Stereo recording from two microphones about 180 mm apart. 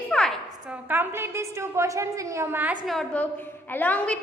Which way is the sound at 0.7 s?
10° right (ahead or behind).